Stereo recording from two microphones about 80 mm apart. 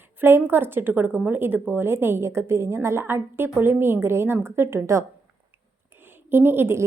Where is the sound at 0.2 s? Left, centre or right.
Right.